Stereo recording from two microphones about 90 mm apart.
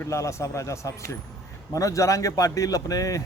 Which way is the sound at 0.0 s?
35° left (ahead or behind).